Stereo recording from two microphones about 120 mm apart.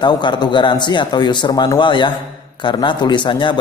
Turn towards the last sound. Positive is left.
turn(degrees=40)  # may be behind; listen again after turning